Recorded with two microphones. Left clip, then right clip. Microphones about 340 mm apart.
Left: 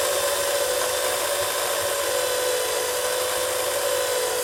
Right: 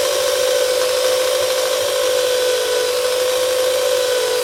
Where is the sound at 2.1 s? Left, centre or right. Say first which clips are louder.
Right 7 dB; centre.